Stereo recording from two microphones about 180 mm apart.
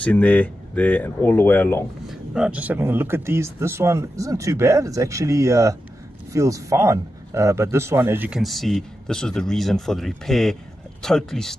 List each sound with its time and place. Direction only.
0.0 s speech: 10° left (ahead or behind)
2.0 s speech: 5° right (ahead or behind)